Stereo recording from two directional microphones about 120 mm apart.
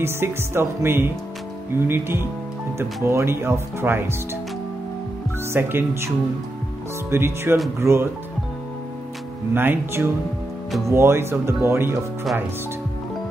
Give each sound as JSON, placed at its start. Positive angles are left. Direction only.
{"t": 0.0, "sound": "speech", "side_deg": -20}
{"t": 5.5, "sound": "speech", "side_deg": -20}
{"t": 7.1, "sound": "speech", "side_deg": -20}
{"t": 9.5, "sound": "speech", "side_deg": -15}